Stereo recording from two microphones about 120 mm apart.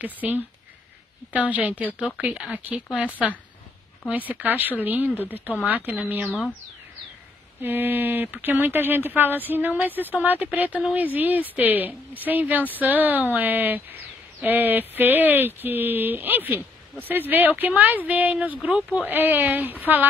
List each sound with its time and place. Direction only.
0.0 s a woman's voice: 15° right (ahead or behind)
4.1 s a woman's voice: 15° right (ahead or behind)
6.2 s speech: centre (ahead or behind)
7.6 s a woman's voice: 15° right (ahead or behind)